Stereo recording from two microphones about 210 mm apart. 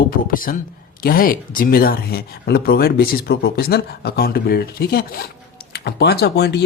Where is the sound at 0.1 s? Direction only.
40° left (ahead or behind).